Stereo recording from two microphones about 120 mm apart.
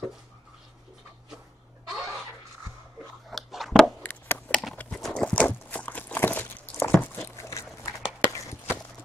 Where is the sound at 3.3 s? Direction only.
Centre (ahead or behind).